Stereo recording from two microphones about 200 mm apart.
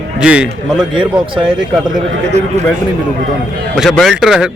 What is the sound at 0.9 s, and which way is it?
Speech, 25° right (ahead or behind).